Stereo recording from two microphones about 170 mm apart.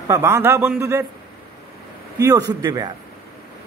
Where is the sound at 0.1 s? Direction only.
15° right (ahead or behind).